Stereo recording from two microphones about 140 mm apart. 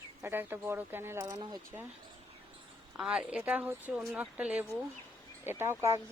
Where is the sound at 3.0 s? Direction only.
5° right (ahead or behind).